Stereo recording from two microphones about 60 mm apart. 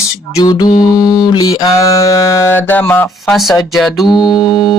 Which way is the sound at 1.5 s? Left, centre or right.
Left.